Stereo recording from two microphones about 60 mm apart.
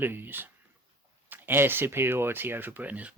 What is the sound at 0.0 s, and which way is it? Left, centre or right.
Speech, right.